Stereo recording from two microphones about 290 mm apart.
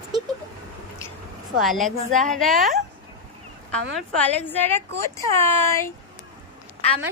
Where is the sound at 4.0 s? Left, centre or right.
Centre.